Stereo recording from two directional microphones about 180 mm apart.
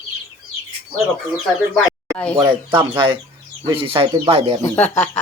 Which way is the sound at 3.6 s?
30° right (ahead or behind).